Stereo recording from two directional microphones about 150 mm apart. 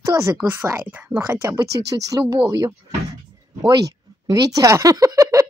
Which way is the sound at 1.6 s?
90° right.